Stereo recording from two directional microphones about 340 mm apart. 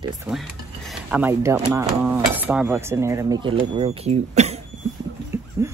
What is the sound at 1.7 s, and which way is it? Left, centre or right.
Speech, centre.